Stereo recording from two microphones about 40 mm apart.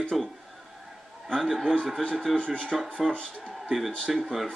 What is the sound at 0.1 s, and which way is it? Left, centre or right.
Speech, centre.